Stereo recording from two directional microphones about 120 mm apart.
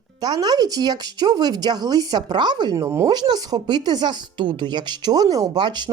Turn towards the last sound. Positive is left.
turn(degrees=-40)  # may be behind; listen again after turning